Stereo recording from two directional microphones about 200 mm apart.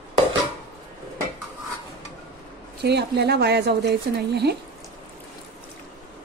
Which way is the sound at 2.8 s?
55° right (ahead or behind).